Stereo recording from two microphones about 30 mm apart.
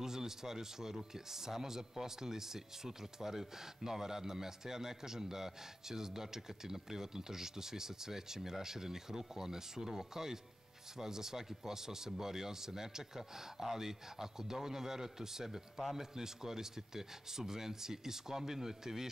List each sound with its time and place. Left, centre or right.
0.0 s speech: centre